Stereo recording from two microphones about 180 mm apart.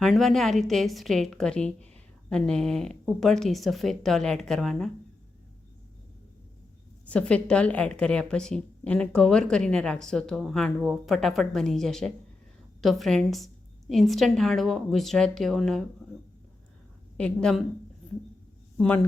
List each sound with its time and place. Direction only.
0.0 s a woman's voice: centre (ahead or behind)
7.1 s a woman's voice: 5° left (ahead or behind)
17.2 s a woman's voice: 5° left (ahead or behind)
18.8 s a woman's voice: 5° left (ahead or behind)